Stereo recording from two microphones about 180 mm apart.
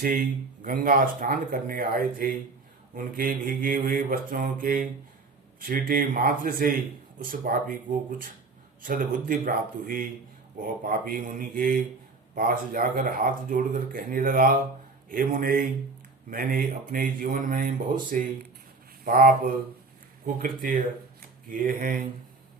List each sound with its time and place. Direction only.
0.0 s a man's voice: 50° right (ahead or behind)